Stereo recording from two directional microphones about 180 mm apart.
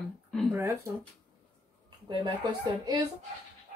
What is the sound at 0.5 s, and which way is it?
Speech, 15° right (ahead or behind).